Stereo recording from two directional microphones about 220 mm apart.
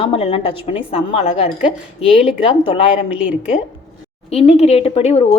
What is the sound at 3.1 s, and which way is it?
Speech, 5° right (ahead or behind).